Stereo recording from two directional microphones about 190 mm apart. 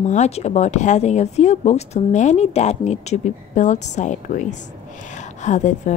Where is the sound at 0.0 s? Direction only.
35° left (ahead or behind).